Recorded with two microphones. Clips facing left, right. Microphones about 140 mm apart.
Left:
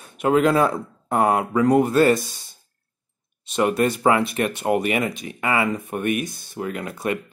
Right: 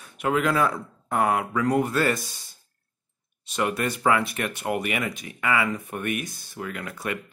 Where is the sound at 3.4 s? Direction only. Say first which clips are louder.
Left 6 dB; 25° left (ahead or behind).